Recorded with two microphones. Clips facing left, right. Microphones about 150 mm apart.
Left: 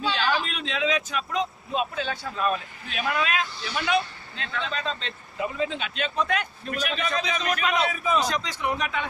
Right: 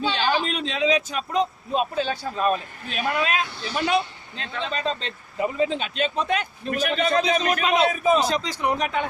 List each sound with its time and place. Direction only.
0.0 s a man's voice: 30° right (ahead or behind)
6.7 s a man's voice: 50° right (ahead or behind)
7.6 s speech: 25° right (ahead or behind)
7.9 s a man's voice: 45° right (ahead or behind)
8.2 s a man's voice: 30° right (ahead or behind)